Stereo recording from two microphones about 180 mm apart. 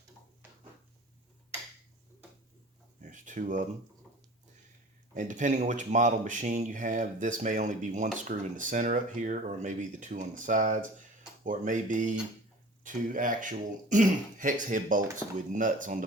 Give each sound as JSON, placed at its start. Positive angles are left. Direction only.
{"t": 3.0, "sound": "speech", "side_deg": -45}
{"t": 5.1, "sound": "speech", "side_deg": -45}